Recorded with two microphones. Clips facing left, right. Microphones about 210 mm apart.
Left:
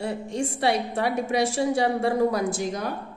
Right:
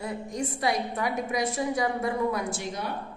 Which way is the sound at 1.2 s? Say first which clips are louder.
Left 5 dB; 80° left.